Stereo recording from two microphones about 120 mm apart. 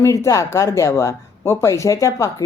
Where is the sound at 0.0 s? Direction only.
25° left (ahead or behind).